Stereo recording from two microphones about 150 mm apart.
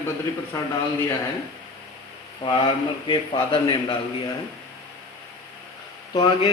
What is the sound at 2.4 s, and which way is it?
A man's voice, 35° left (ahead or behind).